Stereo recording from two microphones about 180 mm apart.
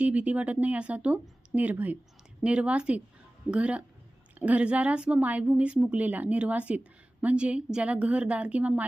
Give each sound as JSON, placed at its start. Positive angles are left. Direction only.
{"t": 0.0, "sound": "a woman's voice", "side_deg": -10}